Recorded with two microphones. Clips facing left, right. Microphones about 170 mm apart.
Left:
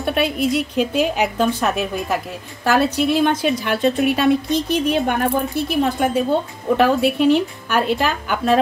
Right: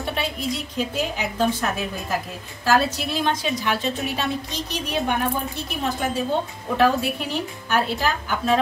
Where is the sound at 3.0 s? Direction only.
55° left (ahead or behind).